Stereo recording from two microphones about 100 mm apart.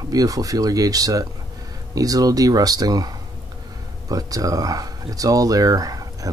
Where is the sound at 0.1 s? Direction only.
35° right (ahead or behind).